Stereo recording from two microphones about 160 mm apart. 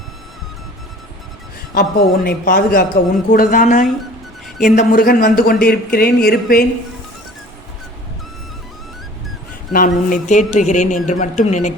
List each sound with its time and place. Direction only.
1.7 s speech: 55° left (ahead or behind)
3.3 s speech: 55° left (ahead or behind)
9.7 s speech: 55° left (ahead or behind)